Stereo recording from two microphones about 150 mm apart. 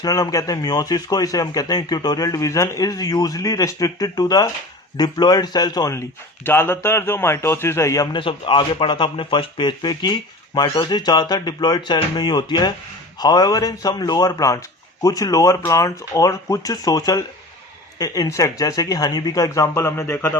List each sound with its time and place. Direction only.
0.0 s speech: 25° left (ahead or behind)
8.2 s speech: 35° left (ahead or behind); by 20.3 s 15° left (ahead or behind)